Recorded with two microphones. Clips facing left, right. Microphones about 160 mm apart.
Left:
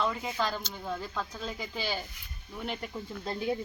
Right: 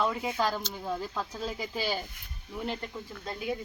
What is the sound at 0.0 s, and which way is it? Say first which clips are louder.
Speech: right 2 dB; 10° right (ahead or behind).